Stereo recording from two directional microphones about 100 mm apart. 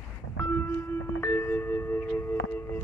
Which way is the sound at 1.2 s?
25° left (ahead or behind).